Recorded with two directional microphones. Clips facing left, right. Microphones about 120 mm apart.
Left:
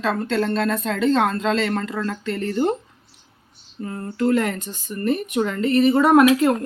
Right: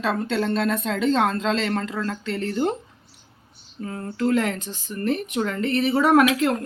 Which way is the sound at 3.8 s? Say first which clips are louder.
Left 2 dB; centre (ahead or behind).